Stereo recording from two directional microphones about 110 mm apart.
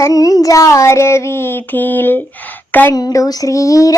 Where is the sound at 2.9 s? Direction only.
35° left (ahead or behind).